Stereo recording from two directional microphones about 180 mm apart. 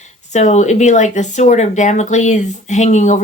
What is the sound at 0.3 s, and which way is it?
A woman's voice, 40° left (ahead or behind).